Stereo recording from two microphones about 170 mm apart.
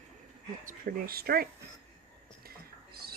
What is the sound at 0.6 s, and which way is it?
Speech, 60° right (ahead or behind).